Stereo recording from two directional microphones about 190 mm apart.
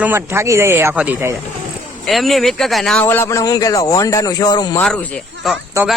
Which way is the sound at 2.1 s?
Centre (ahead or behind).